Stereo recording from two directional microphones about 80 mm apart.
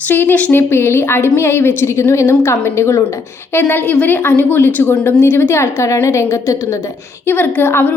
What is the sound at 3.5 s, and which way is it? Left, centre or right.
A woman's voice, left.